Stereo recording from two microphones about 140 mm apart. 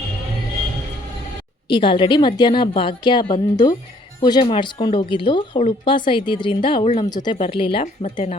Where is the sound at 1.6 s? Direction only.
35° left (ahead or behind).